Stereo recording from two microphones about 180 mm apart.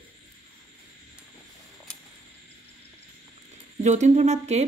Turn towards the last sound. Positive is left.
turn(degrees=-40)  # may be behind; listen again after turning